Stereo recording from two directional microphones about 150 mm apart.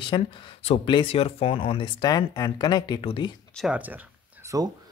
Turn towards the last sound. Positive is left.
turn(degrees=-20)  # may be behind; listen again after turning